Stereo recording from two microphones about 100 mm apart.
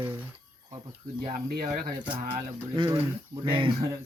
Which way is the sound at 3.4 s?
60° right (ahead or behind).